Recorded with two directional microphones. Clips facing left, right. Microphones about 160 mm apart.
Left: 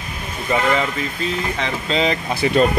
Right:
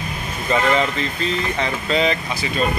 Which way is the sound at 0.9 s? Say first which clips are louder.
Even; 10° left (ahead or behind).